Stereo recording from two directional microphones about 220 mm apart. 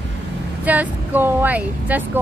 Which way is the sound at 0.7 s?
10° right (ahead or behind).